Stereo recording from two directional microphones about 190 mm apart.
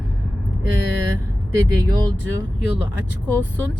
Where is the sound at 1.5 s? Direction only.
15° right (ahead or behind).